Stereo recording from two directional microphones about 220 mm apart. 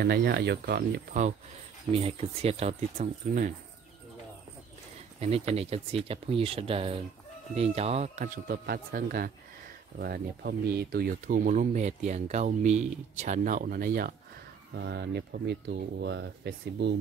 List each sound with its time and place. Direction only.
0.0 s speech: 45° right (ahead or behind)
1.9 s speech: 25° right (ahead or behind)
5.2 s speech: 25° right (ahead or behind)
14.7 s speech: 50° right (ahead or behind)